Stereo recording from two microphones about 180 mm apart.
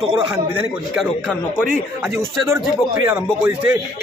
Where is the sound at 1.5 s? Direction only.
10° right (ahead or behind).